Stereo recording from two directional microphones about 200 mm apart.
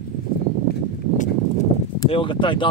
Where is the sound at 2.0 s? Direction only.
25° left (ahead or behind).